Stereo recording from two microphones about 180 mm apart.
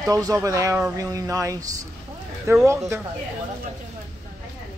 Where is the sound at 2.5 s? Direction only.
15° right (ahead or behind).